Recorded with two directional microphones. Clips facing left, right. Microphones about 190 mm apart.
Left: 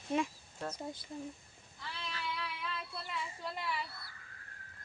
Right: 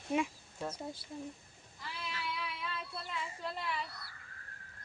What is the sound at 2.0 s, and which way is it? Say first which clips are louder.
Female singing: even; 5° right (ahead or behind).